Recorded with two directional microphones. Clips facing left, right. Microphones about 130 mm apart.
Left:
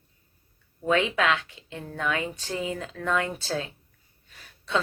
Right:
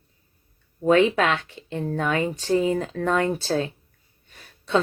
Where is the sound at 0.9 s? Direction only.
40° right (ahead or behind).